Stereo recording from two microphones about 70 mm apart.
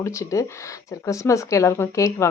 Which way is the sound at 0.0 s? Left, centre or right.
Left.